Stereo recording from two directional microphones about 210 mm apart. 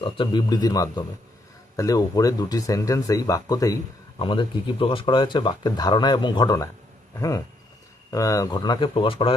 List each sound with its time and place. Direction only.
0.0 s speech: 25° left (ahead or behind)